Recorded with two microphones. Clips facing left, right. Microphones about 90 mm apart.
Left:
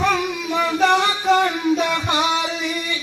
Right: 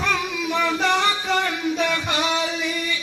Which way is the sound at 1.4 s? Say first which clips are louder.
Left 4 dB; 20° left (ahead or behind).